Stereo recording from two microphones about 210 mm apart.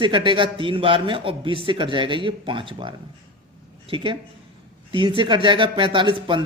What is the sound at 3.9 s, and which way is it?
Speech, 25° right (ahead or behind).